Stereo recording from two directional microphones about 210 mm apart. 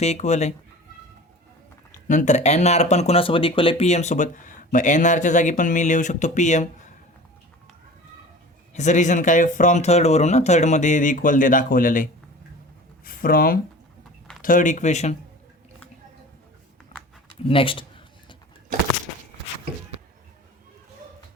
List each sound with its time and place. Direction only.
0.0 s speech: 30° left (ahead or behind)
2.0 s speech: 35° left (ahead or behind)
8.7 s speech: 35° left (ahead or behind)
13.1 s speech: 45° left (ahead or behind)
17.5 s a sound: 25° left (ahead or behind)